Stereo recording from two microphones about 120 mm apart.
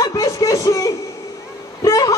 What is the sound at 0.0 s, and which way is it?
Music, 30° left (ahead or behind).